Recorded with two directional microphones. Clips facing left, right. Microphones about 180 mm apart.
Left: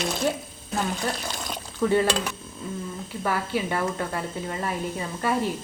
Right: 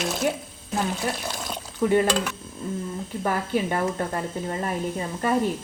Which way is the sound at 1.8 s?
20° right (ahead or behind).